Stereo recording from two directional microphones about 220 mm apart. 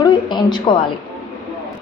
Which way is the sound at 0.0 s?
20° left (ahead or behind).